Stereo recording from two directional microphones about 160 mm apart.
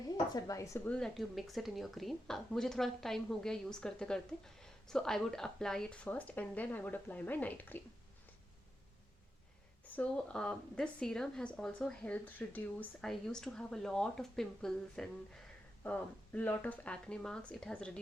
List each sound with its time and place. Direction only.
0.3 s speech: 20° left (ahead or behind)
0.9 s a woman's voice: 5° left (ahead or behind)
9.8 s a woman's voice: 10° left (ahead or behind)